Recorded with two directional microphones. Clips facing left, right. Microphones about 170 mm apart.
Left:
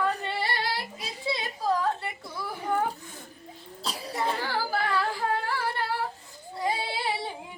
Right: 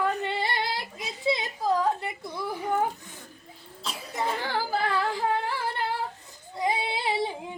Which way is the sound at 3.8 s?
35° left (ahead or behind).